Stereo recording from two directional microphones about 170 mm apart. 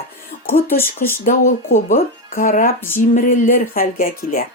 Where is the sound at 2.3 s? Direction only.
55° left (ahead or behind).